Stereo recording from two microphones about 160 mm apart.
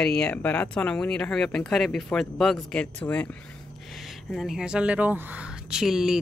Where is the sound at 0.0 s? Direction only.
5° left (ahead or behind).